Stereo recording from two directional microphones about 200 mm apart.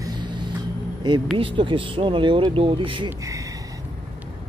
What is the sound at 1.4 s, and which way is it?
Speech, 25° right (ahead or behind).